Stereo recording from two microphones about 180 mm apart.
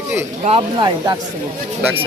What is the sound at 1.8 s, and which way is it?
Speech, 5° right (ahead or behind).